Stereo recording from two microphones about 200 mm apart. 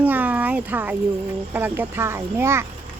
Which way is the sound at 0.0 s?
10° right (ahead or behind).